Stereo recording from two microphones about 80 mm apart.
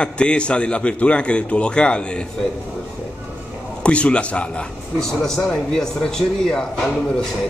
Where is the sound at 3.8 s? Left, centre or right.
Centre.